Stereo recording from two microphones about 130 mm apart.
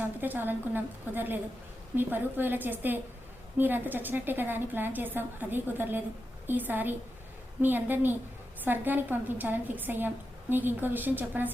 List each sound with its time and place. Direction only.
0.0 s a woman's voice: 15° right (ahead or behind)